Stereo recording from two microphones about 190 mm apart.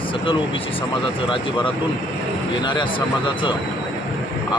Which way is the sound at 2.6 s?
25° left (ahead or behind).